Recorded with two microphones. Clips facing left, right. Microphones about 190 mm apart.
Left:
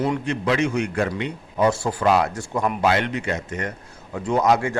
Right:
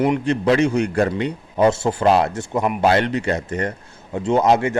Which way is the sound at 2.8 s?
35° right (ahead or behind).